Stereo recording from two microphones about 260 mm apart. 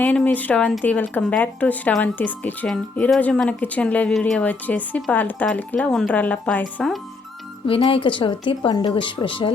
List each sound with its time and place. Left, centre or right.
0.0 s speech: centre
7.7 s speech: left